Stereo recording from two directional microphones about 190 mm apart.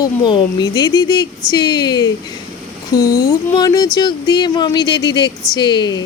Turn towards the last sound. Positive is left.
turn(degrees=20)  # may be behind; listen again after turning